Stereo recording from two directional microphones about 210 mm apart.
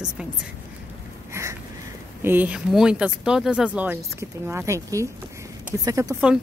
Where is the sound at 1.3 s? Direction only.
15° right (ahead or behind).